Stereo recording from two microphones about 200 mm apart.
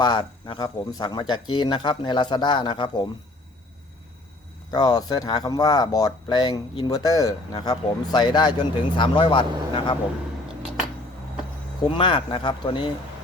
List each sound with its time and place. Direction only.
0.0 s speech: 20° left (ahead or behind)
4.7 s speech: 20° left (ahead or behind)
11.8 s speech: 25° left (ahead or behind)